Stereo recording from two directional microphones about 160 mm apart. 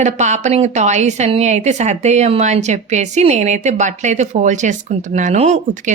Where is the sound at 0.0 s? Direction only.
45° right (ahead or behind).